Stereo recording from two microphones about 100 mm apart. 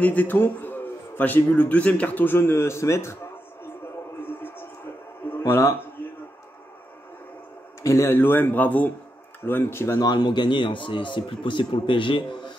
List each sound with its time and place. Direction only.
0.0 s a man's voice: 15° left (ahead or behind)
4.2 s music: 20° left (ahead or behind)
5.5 s a man's voice: 30° left (ahead or behind)
7.8 s a man's voice: 30° left (ahead or behind)
10.0 s a man's voice: 45° left (ahead or behind)